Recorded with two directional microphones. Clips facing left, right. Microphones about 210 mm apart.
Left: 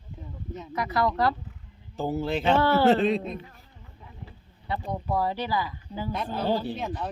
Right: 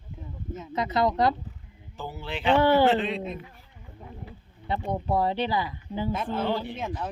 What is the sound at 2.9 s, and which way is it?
Speech, 40° left (ahead or behind).